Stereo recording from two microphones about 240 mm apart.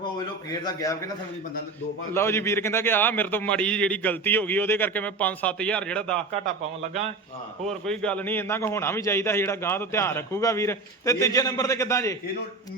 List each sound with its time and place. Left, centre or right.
0.6 s a man's voice: centre
2.1 s a man's voice: centre
7.7 s a man's voice: centre